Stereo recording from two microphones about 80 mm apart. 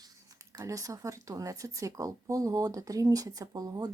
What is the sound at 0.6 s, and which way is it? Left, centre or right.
A woman's voice, right.